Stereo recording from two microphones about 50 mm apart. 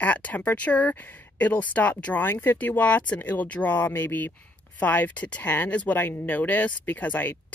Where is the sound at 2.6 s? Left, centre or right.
Left.